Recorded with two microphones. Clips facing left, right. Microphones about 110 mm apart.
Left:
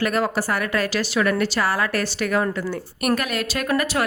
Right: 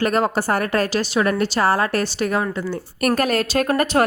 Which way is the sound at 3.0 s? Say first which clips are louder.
Right 4 dB; 40° right (ahead or behind).